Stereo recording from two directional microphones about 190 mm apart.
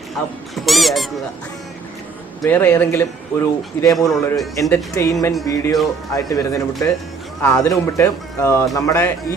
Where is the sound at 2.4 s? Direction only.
10° left (ahead or behind).